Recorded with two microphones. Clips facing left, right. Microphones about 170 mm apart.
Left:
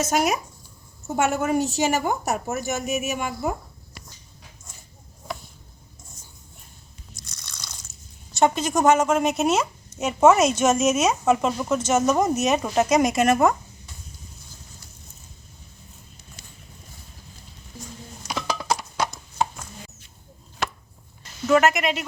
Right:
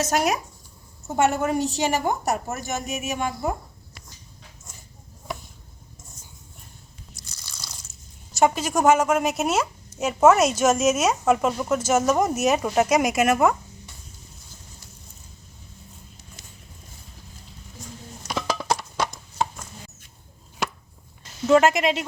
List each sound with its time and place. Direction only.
0.0 s a woman's voice: centre (ahead or behind)
8.3 s a woman's voice: 5° right (ahead or behind)
18.3 s a sound: centre (ahead or behind)
21.4 s a woman's voice: 25° right (ahead or behind)